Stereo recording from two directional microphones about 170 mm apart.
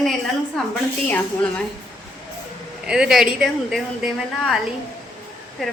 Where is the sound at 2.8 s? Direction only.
5° right (ahead or behind).